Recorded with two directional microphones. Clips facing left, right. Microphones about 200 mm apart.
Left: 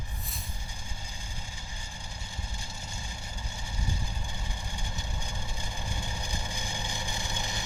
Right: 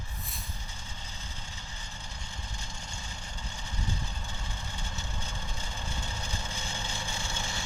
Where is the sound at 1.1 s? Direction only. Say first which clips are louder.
Left 1 dB; 10° left (ahead or behind).